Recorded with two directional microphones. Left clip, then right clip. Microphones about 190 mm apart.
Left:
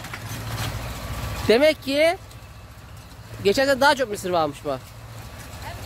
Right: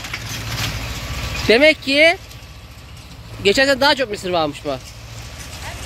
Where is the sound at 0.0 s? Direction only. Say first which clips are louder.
Right 7 dB; 55° left (ahead or behind).